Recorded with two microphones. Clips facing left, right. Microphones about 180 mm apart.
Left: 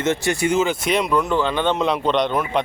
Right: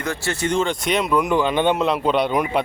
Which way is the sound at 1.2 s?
15° right (ahead or behind).